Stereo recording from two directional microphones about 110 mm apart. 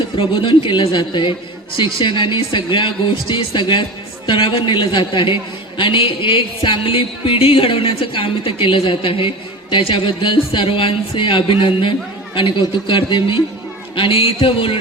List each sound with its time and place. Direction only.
0.2 s a man's voice: 50° left (ahead or behind)